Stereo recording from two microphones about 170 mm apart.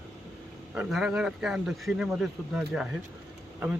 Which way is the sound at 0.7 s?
5° right (ahead or behind).